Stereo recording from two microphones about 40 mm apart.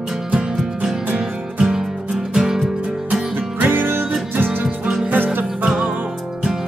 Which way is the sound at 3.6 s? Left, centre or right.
Right.